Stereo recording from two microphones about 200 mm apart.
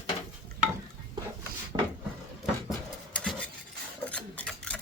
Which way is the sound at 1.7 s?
25° right (ahead or behind).